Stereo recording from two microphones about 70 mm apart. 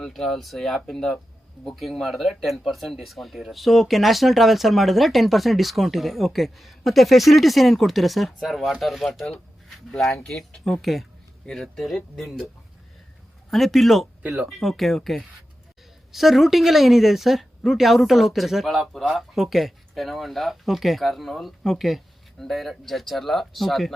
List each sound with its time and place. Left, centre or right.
0.1 s speech: centre
13.5 s speech: centre
14.2 s speech: right
14.4 s speech: centre